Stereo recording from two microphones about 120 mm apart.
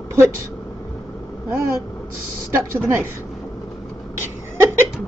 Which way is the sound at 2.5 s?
20° right (ahead or behind).